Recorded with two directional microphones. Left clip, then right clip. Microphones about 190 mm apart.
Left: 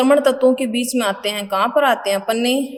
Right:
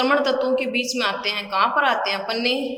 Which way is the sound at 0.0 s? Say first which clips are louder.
Left 6 dB; 40° left (ahead or behind).